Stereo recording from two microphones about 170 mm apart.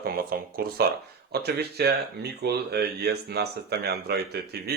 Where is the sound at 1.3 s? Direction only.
70° right (ahead or behind).